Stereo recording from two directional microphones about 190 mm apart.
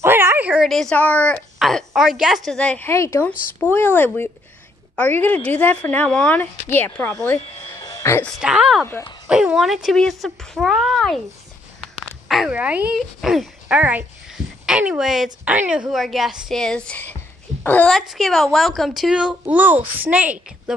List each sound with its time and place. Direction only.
0.0 s a woman's voice: 10° right (ahead or behind); by 7.3 s 5° left (ahead or behind)
7.7 s a sound: 20° left (ahead or behind)
8.3 s speech: 5° right (ahead or behind)